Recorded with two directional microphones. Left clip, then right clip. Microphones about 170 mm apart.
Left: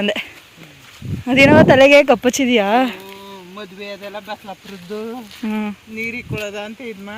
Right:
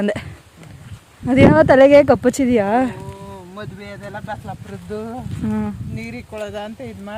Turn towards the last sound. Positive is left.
turn(degrees=-85)